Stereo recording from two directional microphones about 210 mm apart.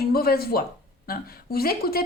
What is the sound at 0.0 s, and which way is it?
Speech, 45° left (ahead or behind).